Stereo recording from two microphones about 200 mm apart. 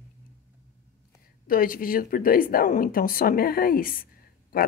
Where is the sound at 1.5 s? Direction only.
45° left (ahead or behind).